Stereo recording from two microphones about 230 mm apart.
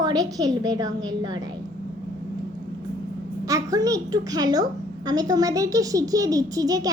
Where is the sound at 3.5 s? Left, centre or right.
Centre.